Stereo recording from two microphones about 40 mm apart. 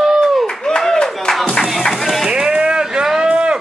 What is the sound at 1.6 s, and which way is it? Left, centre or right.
Music, centre.